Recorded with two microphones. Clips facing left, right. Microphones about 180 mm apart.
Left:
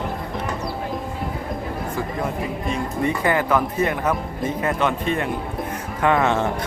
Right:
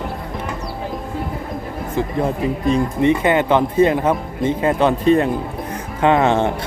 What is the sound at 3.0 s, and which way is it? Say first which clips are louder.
Speech: right 5 dB; 20° right (ahead or behind).